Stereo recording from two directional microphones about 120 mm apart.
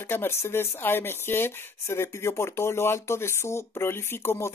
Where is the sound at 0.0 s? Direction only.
20° left (ahead or behind).